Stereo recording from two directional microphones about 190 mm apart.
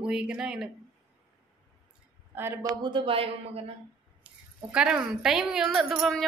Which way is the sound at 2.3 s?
15° right (ahead or behind).